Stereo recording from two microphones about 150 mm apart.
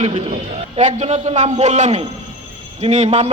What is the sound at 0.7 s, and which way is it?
A man's voice, 50° right (ahead or behind).